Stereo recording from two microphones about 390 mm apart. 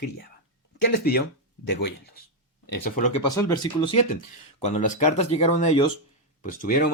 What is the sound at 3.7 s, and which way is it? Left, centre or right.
Speech, centre.